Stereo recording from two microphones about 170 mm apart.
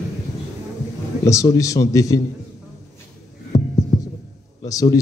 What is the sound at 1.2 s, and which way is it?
Speech, 20° left (ahead or behind).